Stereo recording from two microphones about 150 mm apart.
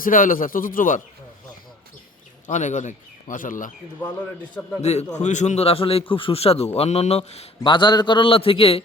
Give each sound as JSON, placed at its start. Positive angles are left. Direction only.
{"t": 0.0, "sound": "speech", "side_deg": 65}
{"t": 2.5, "sound": "speech", "side_deg": 50}
{"t": 4.8, "sound": "a man's voice", "side_deg": 45}